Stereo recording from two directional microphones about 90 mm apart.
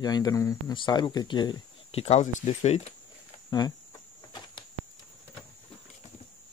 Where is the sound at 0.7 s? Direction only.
60° left (ahead or behind).